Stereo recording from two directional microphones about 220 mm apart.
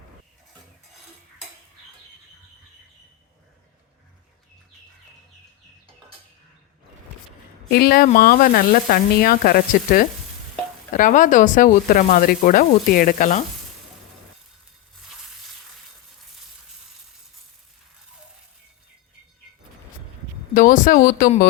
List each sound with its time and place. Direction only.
7.7 s snake: 45° left (ahead or behind)
20.5 s snake: 40° left (ahead or behind)